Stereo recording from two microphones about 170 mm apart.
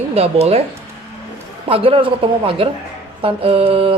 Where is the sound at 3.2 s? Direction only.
35° right (ahead or behind).